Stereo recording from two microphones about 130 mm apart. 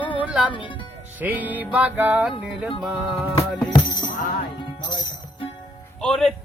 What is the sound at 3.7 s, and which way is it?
Music, 35° left (ahead or behind).